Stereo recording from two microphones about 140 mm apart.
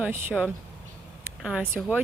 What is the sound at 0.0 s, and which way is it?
Speech, 15° right (ahead or behind).